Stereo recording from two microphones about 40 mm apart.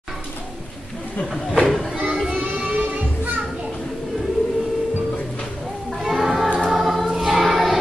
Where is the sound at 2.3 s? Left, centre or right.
Right.